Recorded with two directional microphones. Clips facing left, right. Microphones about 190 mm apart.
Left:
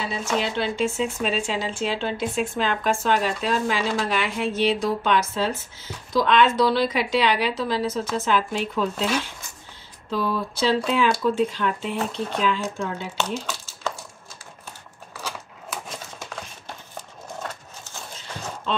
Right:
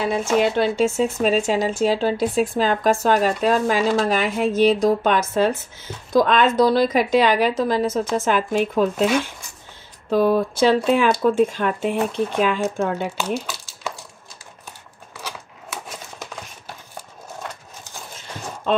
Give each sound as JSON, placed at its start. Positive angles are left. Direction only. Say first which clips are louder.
{"t": 0.1, "sound": "speech", "louder": "right 7 dB", "side_deg": -50}
{"t": 10.0, "sound": "speech", "louder": "right 8 dB", "side_deg": -50}
{"t": 13.2, "sound": "a sound", "louder": "right 3 dB", "side_deg": -10}
{"t": 16.2, "sound": "horse", "louder": "right 1 dB", "side_deg": -10}